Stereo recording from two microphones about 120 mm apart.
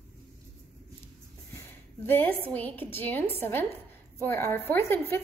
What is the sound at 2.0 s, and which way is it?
A woman's voice, 15° left (ahead or behind).